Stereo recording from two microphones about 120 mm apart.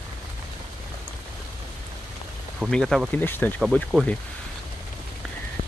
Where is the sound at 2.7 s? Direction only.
Centre (ahead or behind).